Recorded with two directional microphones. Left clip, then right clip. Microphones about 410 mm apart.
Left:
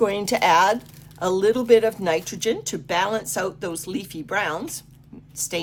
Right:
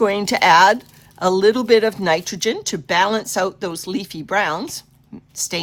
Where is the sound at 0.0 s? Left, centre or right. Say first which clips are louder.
Right 4 dB; centre.